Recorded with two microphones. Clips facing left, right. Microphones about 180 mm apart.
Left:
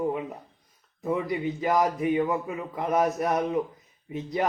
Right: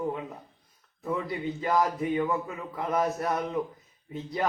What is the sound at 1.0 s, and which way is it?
A man's voice, 20° left (ahead or behind).